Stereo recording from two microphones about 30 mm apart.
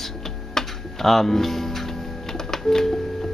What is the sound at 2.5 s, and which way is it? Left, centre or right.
Music, centre.